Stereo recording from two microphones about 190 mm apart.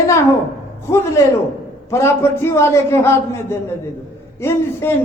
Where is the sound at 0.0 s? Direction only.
15° left (ahead or behind).